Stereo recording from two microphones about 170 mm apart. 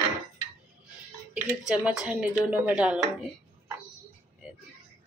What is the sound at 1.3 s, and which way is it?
Speech, 5° right (ahead or behind).